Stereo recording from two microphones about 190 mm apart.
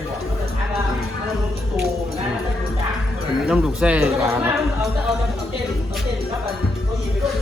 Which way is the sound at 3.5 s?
5° right (ahead or behind).